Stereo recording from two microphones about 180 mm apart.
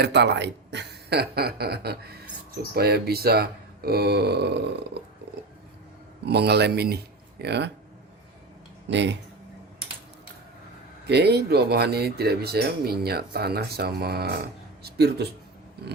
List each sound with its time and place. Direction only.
0.0 s speech: 70° right (ahead or behind)
6.2 s speech: 65° right (ahead or behind)
8.9 s speech: 75° right (ahead or behind)
11.0 s speech: 65° right (ahead or behind)